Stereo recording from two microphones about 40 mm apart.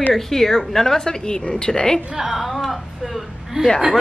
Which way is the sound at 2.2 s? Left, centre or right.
Centre.